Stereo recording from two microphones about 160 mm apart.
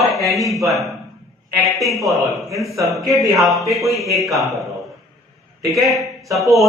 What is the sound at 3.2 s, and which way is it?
Speech, 20° right (ahead or behind).